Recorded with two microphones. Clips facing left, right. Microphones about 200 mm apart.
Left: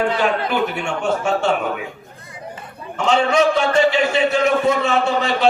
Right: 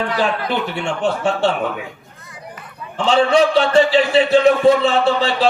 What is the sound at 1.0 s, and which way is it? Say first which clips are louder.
Speech: right 1 dB; 30° right (ahead or behind).